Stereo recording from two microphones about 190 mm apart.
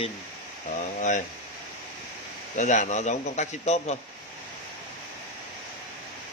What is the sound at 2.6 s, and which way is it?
A man's voice, 40° left (ahead or behind).